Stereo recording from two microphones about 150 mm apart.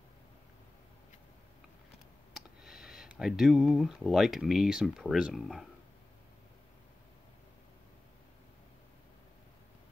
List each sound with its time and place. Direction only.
2.3 s speech: centre (ahead or behind)